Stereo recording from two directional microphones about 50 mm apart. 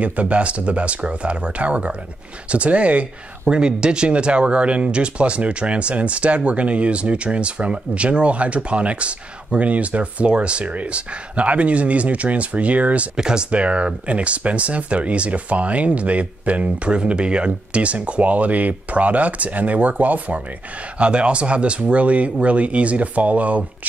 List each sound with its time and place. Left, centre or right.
0.0 s speech: right
13.1 s speech: centre